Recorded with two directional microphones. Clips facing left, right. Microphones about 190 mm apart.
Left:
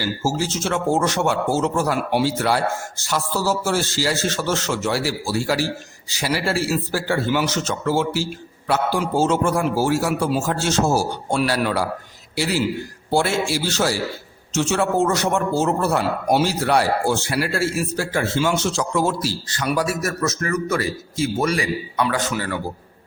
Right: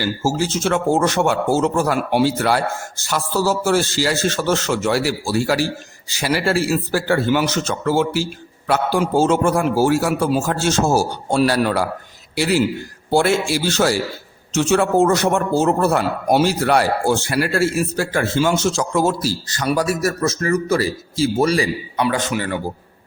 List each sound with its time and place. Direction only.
0.3 s a man's voice: 55° right (ahead or behind)
13.1 s a man's voice: 55° right (ahead or behind); by 21.7 s 35° right (ahead or behind)
21.9 s speech: 20° right (ahead or behind)